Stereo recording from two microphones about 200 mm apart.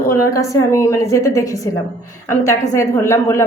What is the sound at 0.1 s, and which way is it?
A woman's voice, 15° left (ahead or behind).